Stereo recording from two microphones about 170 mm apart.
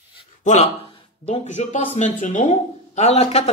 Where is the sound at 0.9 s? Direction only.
35° left (ahead or behind).